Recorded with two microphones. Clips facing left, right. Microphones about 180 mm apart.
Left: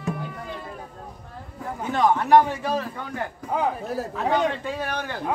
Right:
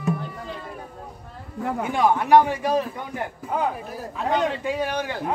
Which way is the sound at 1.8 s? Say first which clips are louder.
Left 1 dB; 10° right (ahead or behind).